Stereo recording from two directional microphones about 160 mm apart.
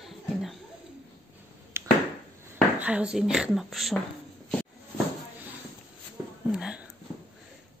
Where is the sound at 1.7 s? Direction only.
15° right (ahead or behind).